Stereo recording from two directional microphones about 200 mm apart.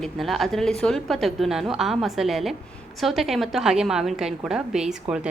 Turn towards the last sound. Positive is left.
turn(degrees=-5)  # may be behind; listen again after turning